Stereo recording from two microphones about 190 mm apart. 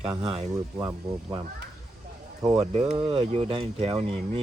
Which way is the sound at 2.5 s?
35° right (ahead or behind).